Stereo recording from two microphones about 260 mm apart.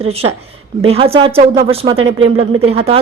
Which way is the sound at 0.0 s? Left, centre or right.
Right.